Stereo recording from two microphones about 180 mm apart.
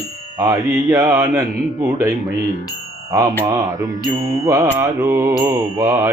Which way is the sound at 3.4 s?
20° right (ahead or behind).